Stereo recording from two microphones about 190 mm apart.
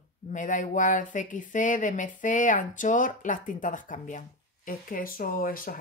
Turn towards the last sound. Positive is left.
turn(degrees=50)  # may be behind; listen again after turning